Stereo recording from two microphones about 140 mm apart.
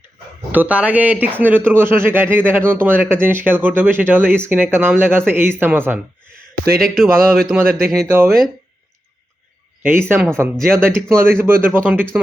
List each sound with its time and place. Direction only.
0.5 s speech: 10° right (ahead or behind)
6.7 s speech: 5° left (ahead or behind)
9.8 s speech: 15° right (ahead or behind)
10.6 s speech: 5° left (ahead or behind)
10.9 s speech: 15° right (ahead or behind)